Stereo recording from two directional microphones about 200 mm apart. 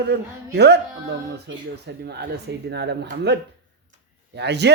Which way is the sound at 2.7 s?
60° right (ahead or behind).